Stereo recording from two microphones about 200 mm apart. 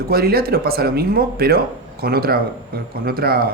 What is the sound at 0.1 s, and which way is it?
Speech, 50° right (ahead or behind).